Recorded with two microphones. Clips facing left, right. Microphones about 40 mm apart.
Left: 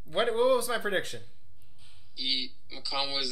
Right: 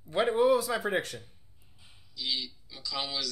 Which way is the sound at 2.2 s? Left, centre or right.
Left.